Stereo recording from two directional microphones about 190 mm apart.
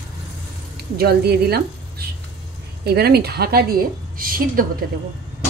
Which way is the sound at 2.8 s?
55° right (ahead or behind).